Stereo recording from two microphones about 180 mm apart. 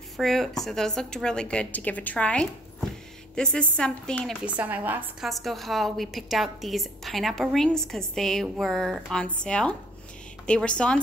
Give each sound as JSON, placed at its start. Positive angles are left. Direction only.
{"t": 0.2, "sound": "a woman's voice", "side_deg": 0}
{"t": 4.6, "sound": "a woman's voice", "side_deg": -10}